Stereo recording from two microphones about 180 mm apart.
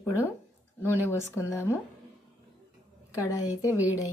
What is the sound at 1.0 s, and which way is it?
Speech, 15° left (ahead or behind).